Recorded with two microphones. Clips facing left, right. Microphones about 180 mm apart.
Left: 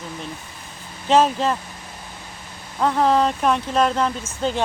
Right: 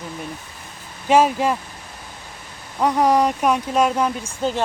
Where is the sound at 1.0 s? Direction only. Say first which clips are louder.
Right 1 dB; 10° right (ahead or behind).